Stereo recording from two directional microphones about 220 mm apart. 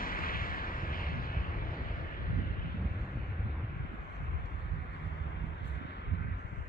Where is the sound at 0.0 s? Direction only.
40° left (ahead or behind).